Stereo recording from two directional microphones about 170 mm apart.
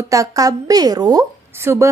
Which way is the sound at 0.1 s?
20° right (ahead or behind).